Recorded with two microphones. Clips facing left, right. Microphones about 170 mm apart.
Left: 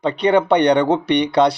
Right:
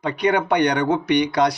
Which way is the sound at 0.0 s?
30° left (ahead or behind).